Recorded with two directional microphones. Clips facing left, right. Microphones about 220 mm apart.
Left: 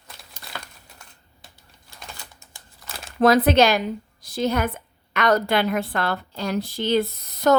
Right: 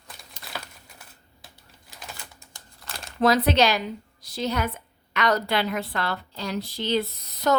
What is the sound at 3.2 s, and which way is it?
A woman's voice, 50° left (ahead or behind).